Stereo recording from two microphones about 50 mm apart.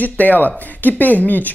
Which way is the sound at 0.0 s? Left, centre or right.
Left.